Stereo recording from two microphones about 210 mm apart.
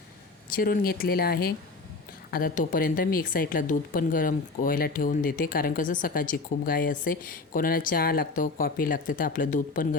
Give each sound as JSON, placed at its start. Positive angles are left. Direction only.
{"t": 0.5, "sound": "speech", "side_deg": 45}